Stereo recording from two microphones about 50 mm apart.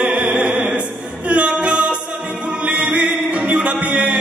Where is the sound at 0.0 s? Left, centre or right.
Centre.